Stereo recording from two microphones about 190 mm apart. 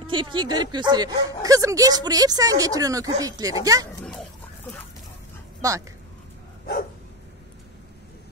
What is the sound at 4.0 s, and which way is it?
Dog, centre (ahead or behind).